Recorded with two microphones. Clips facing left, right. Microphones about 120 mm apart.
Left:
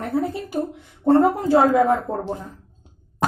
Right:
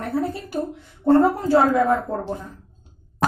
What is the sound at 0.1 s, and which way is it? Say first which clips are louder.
A woman's voice: left 1 dB; 20° left (ahead or behind).